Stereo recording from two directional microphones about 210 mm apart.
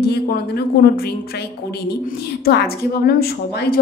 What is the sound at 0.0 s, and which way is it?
A woman's voice, 50° left (ahead or behind).